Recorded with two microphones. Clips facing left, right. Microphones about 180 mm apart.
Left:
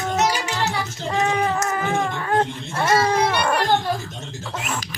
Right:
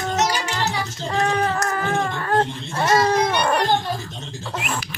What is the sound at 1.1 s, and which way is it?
Cat, 10° left (ahead or behind).